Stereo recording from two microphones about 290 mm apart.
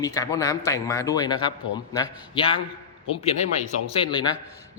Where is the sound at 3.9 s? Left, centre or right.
Centre.